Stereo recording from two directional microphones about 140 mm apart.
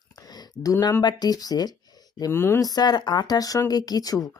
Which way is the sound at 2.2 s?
15° left (ahead or behind).